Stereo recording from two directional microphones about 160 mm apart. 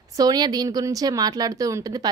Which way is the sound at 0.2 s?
25° right (ahead or behind).